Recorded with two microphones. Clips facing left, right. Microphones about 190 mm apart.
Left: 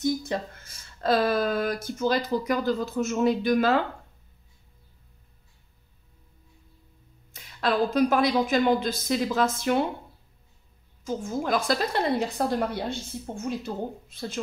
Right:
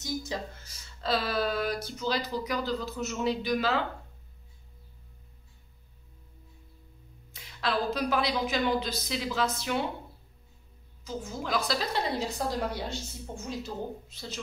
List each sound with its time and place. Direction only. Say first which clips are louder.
0.0 s speech: left 7 dB; 55° left (ahead or behind)
7.3 s speech: left 6 dB; 50° left (ahead or behind)
11.1 s a woman's voice: left 7 dB; 50° left (ahead or behind)